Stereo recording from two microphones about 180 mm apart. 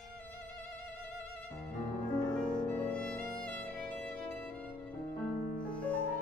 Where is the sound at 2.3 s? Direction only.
5° left (ahead or behind).